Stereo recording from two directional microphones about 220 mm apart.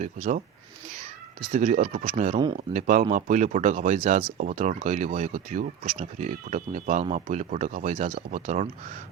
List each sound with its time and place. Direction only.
0.0 s speech: 35° right (ahead or behind)
1.5 s speech: 35° right (ahead or behind)